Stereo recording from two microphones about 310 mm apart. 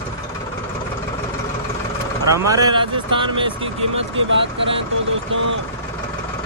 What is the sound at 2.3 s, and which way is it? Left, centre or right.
Speech, centre.